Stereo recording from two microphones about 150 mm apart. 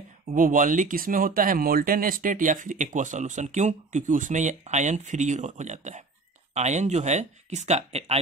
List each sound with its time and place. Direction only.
0.3 s speech: 60° right (ahead or behind); by 8.2 s 45° right (ahead or behind)